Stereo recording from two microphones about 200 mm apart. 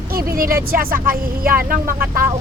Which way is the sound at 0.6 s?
45° right (ahead or behind).